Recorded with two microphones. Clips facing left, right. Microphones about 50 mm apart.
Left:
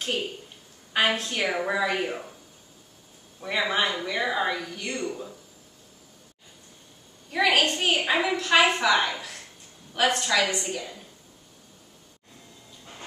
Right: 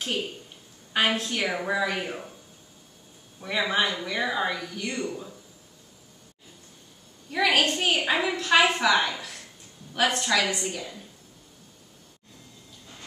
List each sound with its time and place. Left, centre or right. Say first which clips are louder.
0.0 s a woman's voice: left 1 dB; centre
3.3 s a woman's voice: even; centre
7.3 s a woman's voice: left 1 dB; centre